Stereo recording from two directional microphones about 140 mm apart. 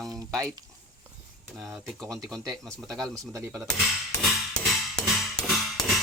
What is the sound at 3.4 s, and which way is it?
Speech, 10° right (ahead or behind).